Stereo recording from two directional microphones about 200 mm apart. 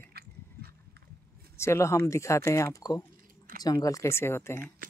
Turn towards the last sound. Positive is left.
turn(degrees=10)  # may be behind; listen again after turning